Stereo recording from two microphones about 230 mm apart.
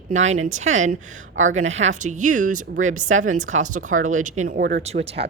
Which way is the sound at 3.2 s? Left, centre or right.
Right.